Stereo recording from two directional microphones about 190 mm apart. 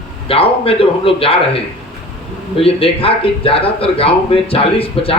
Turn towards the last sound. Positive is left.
turn(degrees=30)  # may be behind; listen again after turning